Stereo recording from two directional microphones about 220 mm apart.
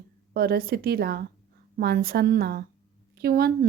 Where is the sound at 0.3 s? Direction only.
45° right (ahead or behind).